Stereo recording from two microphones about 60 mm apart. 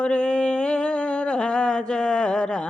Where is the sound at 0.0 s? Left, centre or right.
Centre.